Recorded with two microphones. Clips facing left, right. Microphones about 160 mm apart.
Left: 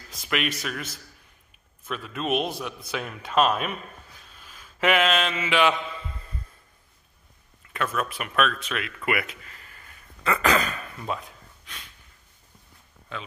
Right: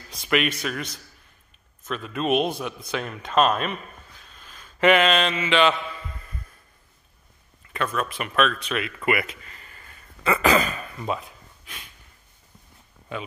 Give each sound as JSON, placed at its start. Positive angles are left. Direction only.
{"t": 0.1, "sound": "a man's voice", "side_deg": 0}
{"t": 4.4, "sound": "mantra", "side_deg": 5}
{"t": 7.7, "sound": "a man's voice", "side_deg": 5}
{"t": 13.1, "sound": "speech", "side_deg": -15}